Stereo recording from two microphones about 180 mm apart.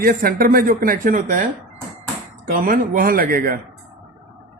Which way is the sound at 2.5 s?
50° right (ahead or behind).